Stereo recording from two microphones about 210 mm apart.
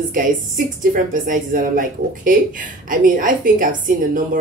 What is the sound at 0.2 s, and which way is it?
Speech, 40° right (ahead or behind).